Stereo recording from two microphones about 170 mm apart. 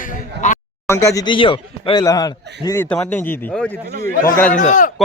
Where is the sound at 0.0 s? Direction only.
50° left (ahead or behind).